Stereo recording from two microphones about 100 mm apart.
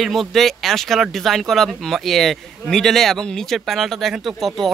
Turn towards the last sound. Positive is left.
turn(degrees=0)  # may be behind; listen again after turning